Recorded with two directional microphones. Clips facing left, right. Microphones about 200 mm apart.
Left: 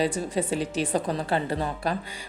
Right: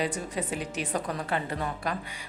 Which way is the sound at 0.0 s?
30° left (ahead or behind).